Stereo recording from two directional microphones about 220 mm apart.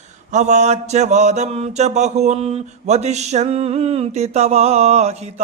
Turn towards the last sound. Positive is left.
turn(degrees=-30)  # may be behind; listen again after turning